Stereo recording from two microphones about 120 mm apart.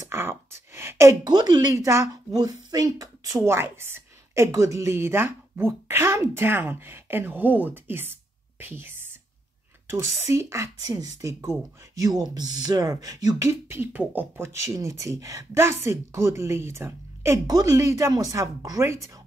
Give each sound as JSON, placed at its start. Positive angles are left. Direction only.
{"t": 0.0, "sound": "a sound", "side_deg": -20}
{"t": 1.3, "sound": "a woman's voice", "side_deg": -35}
{"t": 10.2, "sound": "speech", "side_deg": -25}